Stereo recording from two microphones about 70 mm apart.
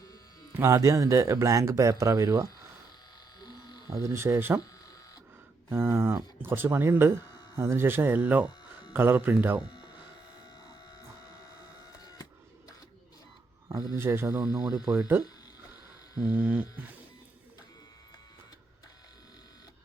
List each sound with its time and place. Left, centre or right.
0.5 s speech: right
3.4 s electric shaver: left
4.0 s speech: right
5.6 s speech: right
8.9 s a sound: right
13.7 s speech: right
14.3 s speech: centre
16.1 s a sound: centre